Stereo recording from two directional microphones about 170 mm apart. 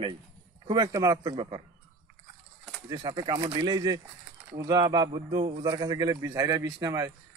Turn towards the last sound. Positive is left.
turn(degrees=-20)  # may be behind; listen again after turning